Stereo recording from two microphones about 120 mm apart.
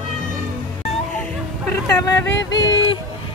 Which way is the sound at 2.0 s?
25° left (ahead or behind).